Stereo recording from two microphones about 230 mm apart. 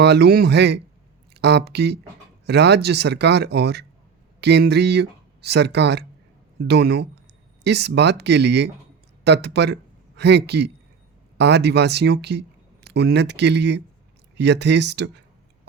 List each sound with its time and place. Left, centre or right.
0.0 s speech: right